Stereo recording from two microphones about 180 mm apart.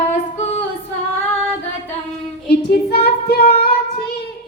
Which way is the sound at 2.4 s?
60° left (ahead or behind).